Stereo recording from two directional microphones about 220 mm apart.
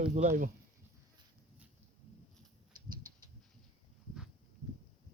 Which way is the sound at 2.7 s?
20° right (ahead or behind).